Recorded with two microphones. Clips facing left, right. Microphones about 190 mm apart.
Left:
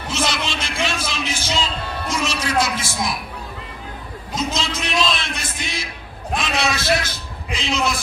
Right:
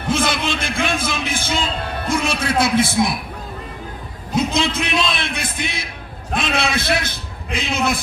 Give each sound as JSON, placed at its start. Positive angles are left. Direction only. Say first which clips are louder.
{"t": 0.1, "sound": "a man's voice", "louder": "right 4 dB", "side_deg": -55}
{"t": 4.4, "sound": "a man's voice", "louder": "right 5 dB", "side_deg": -60}